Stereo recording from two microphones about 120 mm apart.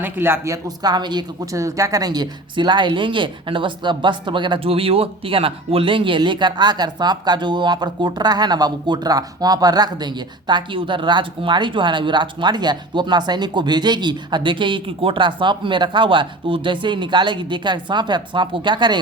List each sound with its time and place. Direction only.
0.0 s speech: 20° right (ahead or behind); by 1.2 s 35° right (ahead or behind)
1.5 s a woman's voice: 25° right (ahead or behind)